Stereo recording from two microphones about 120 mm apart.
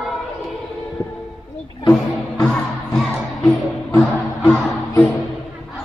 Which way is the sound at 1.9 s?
20° left (ahead or behind).